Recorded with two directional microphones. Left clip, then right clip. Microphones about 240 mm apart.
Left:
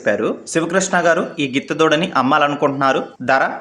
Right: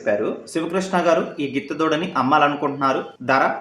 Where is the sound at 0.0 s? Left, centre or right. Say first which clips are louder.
Left 3 dB; left.